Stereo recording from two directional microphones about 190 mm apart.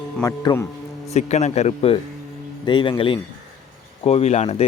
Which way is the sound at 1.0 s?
35° left (ahead or behind).